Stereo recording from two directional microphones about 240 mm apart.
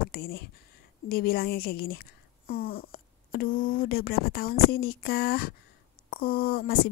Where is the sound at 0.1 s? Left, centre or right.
Left.